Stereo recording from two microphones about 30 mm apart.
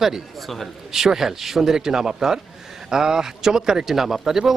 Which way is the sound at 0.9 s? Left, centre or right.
Centre.